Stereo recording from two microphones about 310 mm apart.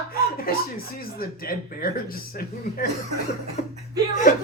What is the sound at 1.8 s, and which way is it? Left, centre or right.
Speech, left.